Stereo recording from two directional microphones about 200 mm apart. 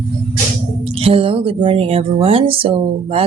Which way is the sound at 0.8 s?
30° right (ahead or behind).